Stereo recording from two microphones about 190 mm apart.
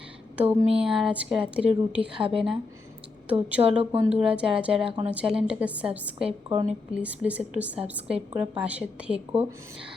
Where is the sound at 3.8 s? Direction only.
30° right (ahead or behind).